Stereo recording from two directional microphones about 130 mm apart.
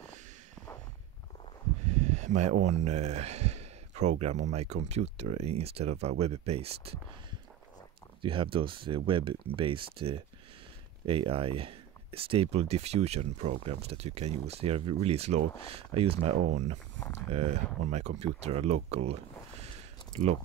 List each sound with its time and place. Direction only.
1.9 s speech: 60° right (ahead or behind)
8.2 s speech: 40° right (ahead or behind)